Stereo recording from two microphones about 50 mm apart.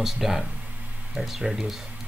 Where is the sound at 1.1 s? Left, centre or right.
Centre.